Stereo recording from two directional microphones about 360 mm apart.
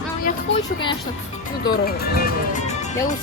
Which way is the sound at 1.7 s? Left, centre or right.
Left.